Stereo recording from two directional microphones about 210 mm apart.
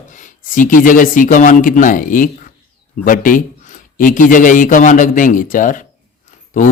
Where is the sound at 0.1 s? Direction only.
40° left (ahead or behind).